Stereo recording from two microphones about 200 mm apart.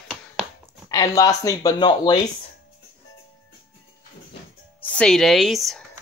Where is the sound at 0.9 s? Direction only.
15° left (ahead or behind).